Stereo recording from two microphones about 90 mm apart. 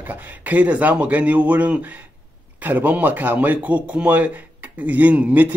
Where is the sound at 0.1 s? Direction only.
15° right (ahead or behind).